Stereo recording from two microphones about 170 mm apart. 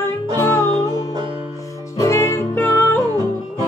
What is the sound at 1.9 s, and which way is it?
Music, 15° left (ahead or behind).